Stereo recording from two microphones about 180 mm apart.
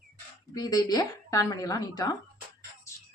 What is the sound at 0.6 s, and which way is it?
A woman's voice, 20° left (ahead or behind).